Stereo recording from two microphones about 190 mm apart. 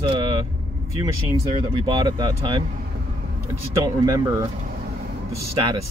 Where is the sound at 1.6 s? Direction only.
25° right (ahead or behind).